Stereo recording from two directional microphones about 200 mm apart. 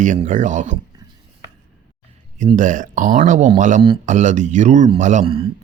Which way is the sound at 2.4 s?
40° right (ahead or behind).